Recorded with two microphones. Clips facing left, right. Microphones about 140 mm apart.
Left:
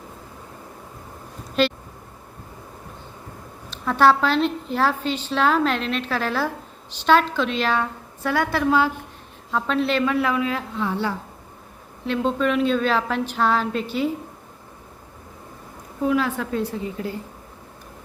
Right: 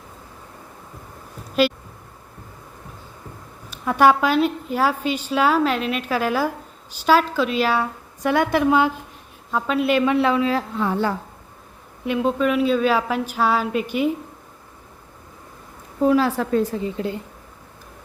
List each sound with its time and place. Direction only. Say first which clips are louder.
1.6 s a woman's voice: right 2 dB; 5° right (ahead or behind)
3.7 s a woman's voice: right 1 dB; 10° right (ahead or behind)
8.3 s a woman's voice: right 3 dB; 20° right (ahead or behind)
9.5 s a woman's voice: right 2 dB; 5° right (ahead or behind)
10.1 s a woman's voice: right 4 dB; 25° right (ahead or behind)
10.8 s a woman's voice: right 3 dB; 45° right (ahead or behind)
12.0 s a woman's voice: right 2 dB; 10° right (ahead or behind)
16.0 s a woman's voice: right 4 dB; 35° right (ahead or behind)